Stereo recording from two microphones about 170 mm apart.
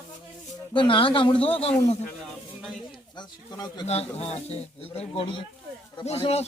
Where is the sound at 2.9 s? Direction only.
25° left (ahead or behind).